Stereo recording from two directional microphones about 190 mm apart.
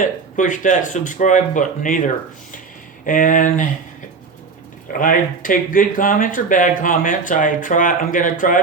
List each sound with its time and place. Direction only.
0.0 s speech: 45° left (ahead or behind)
3.1 s speech: 45° left (ahead or behind)
4.9 s speech: 45° left (ahead or behind)